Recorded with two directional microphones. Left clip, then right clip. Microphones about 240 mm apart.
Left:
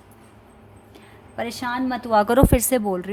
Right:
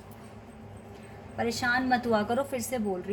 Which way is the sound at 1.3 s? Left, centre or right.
Left.